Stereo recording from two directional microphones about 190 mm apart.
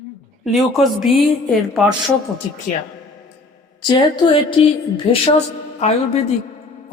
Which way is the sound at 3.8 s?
25° left (ahead or behind).